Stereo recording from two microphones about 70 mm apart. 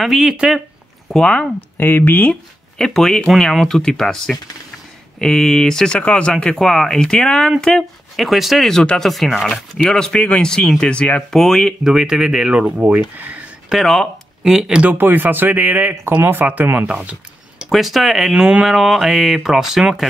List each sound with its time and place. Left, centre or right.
0.0 s speech: centre
1.1 s speech: centre
1.8 s speech: left
2.8 s speech: centre
11.3 s speech: centre
11.8 s speech: centre
13.7 s a sound: centre
14.5 s speech: centre
14.8 s speech: right
16.8 s a sound: centre
17.6 s speech: centre
18.3 s speech: centre